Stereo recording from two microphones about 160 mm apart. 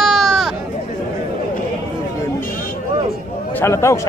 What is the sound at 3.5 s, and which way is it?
Speech, 15° left (ahead or behind).